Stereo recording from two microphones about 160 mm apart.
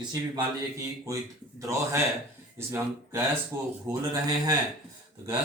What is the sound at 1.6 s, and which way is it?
Speech, 20° right (ahead or behind).